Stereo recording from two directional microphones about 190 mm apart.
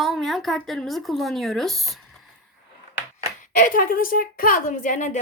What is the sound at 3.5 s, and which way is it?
A woman's voice, 45° left (ahead or behind).